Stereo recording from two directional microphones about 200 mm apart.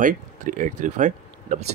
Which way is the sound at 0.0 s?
40° right (ahead or behind).